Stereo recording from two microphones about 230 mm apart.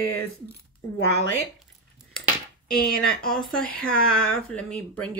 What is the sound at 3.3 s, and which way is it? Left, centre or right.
Speech, centre.